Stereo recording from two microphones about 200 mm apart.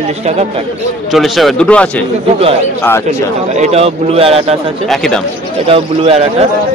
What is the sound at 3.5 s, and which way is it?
A man's voice, 35° right (ahead or behind).